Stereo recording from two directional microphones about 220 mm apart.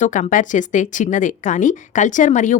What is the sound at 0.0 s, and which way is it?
Speech, 35° left (ahead or behind).